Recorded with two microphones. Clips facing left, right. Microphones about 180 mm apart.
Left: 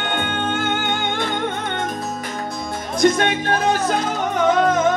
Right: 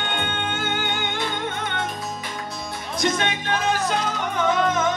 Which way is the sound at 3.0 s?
50° left (ahead or behind).